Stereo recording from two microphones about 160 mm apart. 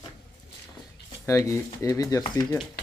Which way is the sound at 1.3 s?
20° left (ahead or behind).